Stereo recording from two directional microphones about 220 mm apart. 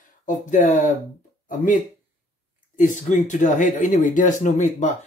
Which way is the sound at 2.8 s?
35° left (ahead or behind).